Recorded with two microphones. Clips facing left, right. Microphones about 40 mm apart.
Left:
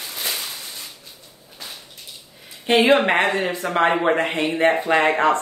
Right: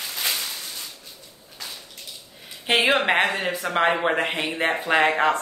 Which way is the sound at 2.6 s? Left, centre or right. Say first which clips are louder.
Left 4 dB; centre.